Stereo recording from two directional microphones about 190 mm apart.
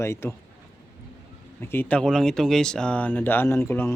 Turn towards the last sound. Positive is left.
turn(degrees=10)  # may be behind; listen again after turning